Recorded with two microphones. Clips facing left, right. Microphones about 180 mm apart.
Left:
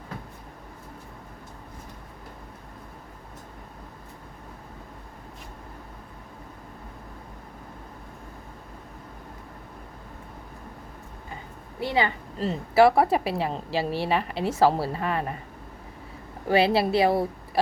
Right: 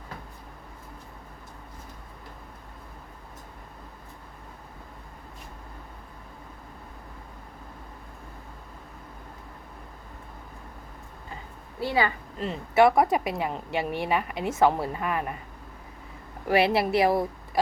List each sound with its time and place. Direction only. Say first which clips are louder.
11.8 s a woman's voice: even; 20° left (ahead or behind)
12.4 s a woman's voice: left 2 dB; 35° left (ahead or behind)
16.5 s a woman's voice: left 1 dB; 30° left (ahead or behind)